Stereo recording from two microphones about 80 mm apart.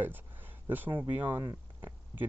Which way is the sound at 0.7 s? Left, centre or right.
Right.